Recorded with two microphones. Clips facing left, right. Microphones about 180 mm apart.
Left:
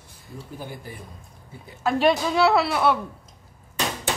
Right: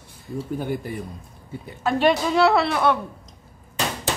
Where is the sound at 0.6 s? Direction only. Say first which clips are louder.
Right 7 dB; 60° right (ahead or behind).